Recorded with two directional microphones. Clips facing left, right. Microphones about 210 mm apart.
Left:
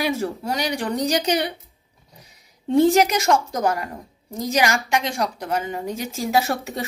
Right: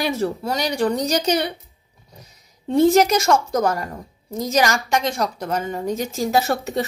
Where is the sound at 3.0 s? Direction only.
15° left (ahead or behind).